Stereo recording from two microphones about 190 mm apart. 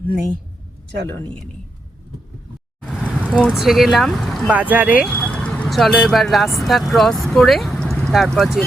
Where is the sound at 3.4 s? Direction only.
Centre (ahead or behind).